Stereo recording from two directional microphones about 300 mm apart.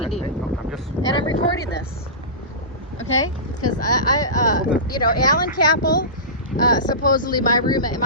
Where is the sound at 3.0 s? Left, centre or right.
Left.